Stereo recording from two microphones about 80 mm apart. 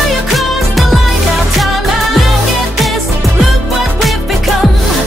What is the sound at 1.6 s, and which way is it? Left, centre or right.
Music of asia, centre.